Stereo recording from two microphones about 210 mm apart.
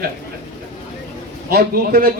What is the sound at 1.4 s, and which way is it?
Speech, 45° right (ahead or behind).